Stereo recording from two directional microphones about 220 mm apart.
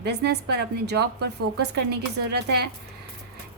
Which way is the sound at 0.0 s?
50° right (ahead or behind).